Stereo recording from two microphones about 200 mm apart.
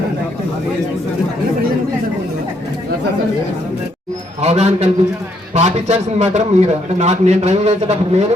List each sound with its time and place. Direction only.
4.4 s a man's voice: 35° right (ahead or behind)